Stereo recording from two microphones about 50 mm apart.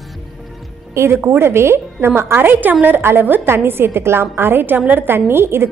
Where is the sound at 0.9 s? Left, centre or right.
Right.